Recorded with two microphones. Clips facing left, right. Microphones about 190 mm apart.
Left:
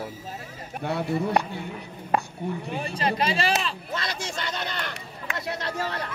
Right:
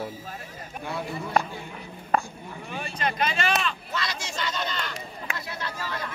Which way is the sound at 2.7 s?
30° left (ahead or behind).